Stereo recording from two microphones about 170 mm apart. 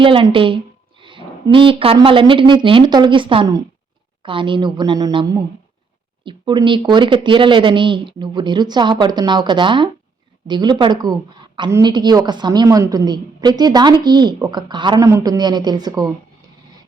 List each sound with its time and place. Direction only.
0.0 s a woman's voice: 30° right (ahead or behind)